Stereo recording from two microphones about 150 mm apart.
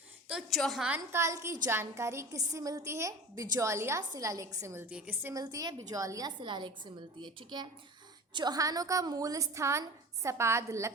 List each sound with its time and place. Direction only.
0.3 s a woman's voice: 5° right (ahead or behind)
0.9 s a woman's voice: 15° right (ahead or behind)
5.3 s a woman's voice: 25° right (ahead or behind)